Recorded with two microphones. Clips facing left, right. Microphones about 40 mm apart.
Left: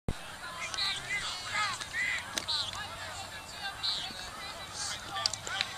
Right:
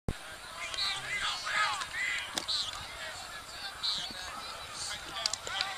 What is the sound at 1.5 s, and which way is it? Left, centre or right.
Music, centre.